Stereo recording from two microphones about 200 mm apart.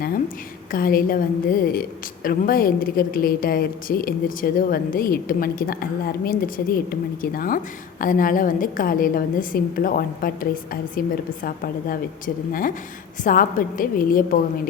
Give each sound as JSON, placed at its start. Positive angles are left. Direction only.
{"t": 0.7, "sound": "a woman's voice", "side_deg": 45}